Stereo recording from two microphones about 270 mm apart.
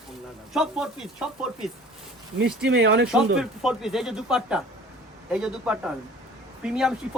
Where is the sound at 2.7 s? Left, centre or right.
Right.